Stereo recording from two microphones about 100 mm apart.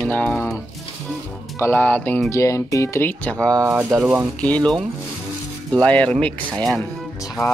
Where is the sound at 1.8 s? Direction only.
15° left (ahead or behind).